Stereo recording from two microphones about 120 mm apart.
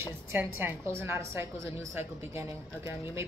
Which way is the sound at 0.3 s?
15° right (ahead or behind).